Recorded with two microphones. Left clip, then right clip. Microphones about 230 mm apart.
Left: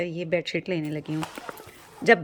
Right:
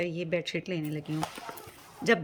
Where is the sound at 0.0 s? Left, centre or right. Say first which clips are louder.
Left 4 dB; centre.